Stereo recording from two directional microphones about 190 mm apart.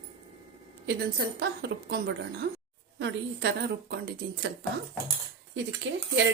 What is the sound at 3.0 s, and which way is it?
Speech, 65° right (ahead or behind).